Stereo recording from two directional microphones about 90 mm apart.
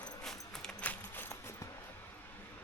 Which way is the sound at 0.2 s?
5° left (ahead or behind).